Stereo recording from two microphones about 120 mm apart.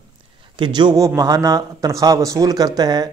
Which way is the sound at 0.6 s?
40° right (ahead or behind).